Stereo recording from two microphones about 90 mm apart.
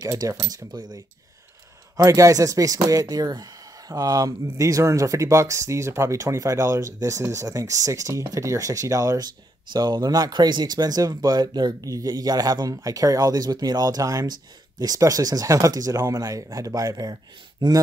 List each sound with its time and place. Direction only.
0.0 s speech: 35° right (ahead or behind)
2.0 s speech: 35° right (ahead or behind)
9.7 s speech: 55° right (ahead or behind)